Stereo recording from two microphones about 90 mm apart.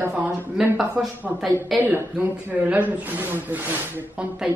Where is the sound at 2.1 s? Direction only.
15° right (ahead or behind).